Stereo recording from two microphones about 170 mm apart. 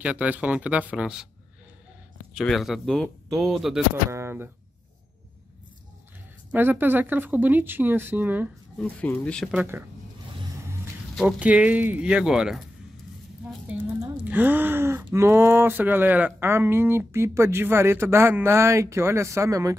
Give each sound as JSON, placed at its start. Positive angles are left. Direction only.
{"t": 0.0, "sound": "speech", "side_deg": -10}
{"t": 2.3, "sound": "speech", "side_deg": 0}
{"t": 4.1, "sound": "speech", "side_deg": -15}
{"t": 6.5, "sound": "speech", "side_deg": -10}
{"t": 8.7, "sound": "speech", "side_deg": 10}
{"t": 9.5, "sound": "speech", "side_deg": -10}
{"t": 11.1, "sound": "speech", "side_deg": -5}
{"t": 14.0, "sound": "speech", "side_deg": -10}